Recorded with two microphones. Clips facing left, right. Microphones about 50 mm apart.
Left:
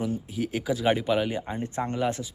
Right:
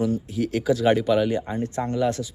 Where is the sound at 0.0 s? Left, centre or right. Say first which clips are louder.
Right 5 dB; centre.